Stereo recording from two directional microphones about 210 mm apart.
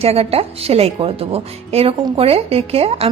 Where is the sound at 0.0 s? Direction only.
30° right (ahead or behind).